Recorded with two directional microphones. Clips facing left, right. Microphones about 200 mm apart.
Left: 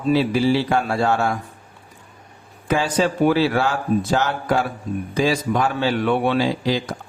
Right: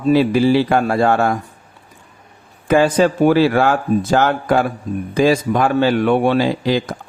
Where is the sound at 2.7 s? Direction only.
55° right (ahead or behind).